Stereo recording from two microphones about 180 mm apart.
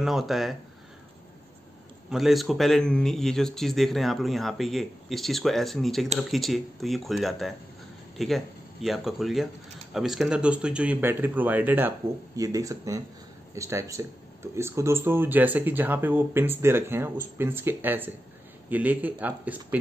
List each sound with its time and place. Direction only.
0.0 s a man's voice: centre (ahead or behind)
2.0 s a man's voice: centre (ahead or behind)